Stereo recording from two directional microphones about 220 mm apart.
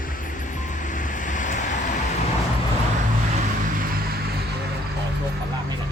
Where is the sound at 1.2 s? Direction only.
35° left (ahead or behind).